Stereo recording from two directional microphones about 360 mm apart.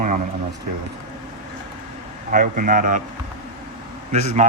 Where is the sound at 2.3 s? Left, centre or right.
Right.